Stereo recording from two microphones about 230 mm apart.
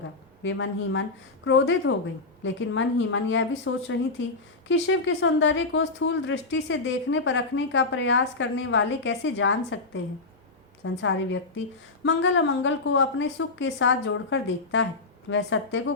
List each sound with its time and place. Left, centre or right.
0.4 s a woman's voice: left